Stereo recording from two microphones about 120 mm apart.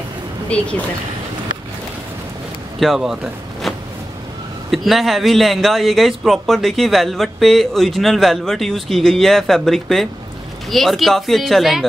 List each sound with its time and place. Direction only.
0.5 s speech: 10° left (ahead or behind)
2.8 s speech: centre (ahead or behind)
3.7 s a sound: centre (ahead or behind)
4.6 s speech: centre (ahead or behind)